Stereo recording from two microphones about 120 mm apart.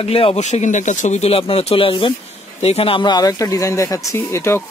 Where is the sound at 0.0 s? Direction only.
55° left (ahead or behind).